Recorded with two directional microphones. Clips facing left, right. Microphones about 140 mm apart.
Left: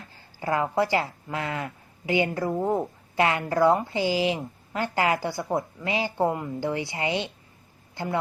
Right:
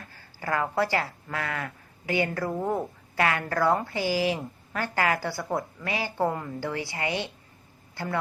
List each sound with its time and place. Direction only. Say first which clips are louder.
0.1 s a woman's voice: left 3 dB; 20° left (ahead or behind)